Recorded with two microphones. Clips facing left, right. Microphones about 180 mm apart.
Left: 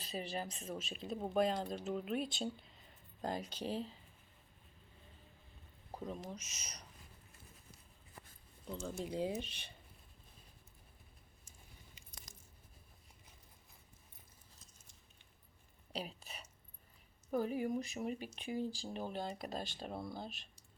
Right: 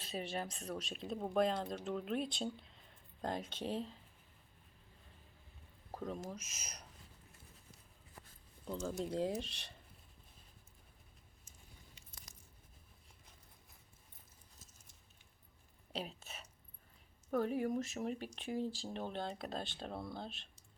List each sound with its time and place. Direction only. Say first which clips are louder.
0.0 s speech: right 1 dB; centre (ahead or behind)
5.9 s speech: right 1 dB; centre (ahead or behind)
8.7 s speech: right 2 dB; centre (ahead or behind)
15.9 s speech: even; centre (ahead or behind)